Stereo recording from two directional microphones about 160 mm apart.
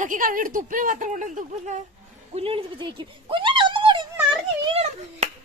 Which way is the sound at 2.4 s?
35° right (ahead or behind).